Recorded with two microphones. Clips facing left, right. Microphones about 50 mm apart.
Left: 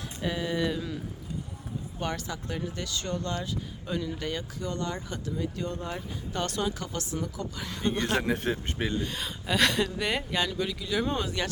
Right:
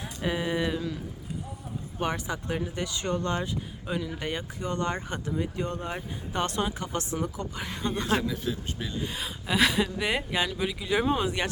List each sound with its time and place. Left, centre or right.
0.2 s a sound: right
2.0 s speech: right
7.8 s speech: left
9.0 s speech: centre
11.0 s speech: centre